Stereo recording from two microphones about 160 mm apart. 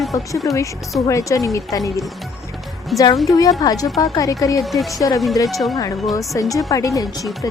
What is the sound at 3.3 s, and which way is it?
A woman's voice, 20° left (ahead or behind).